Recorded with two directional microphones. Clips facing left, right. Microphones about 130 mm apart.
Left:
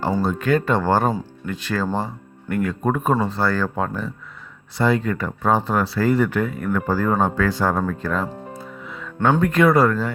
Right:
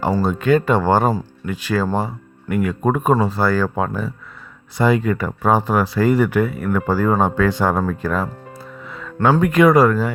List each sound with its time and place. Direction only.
0.3 s speech: 20° right (ahead or behind)
7.8 s speech: 5° right (ahead or behind)
8.8 s music: centre (ahead or behind)
9.2 s speech: 10° right (ahead or behind)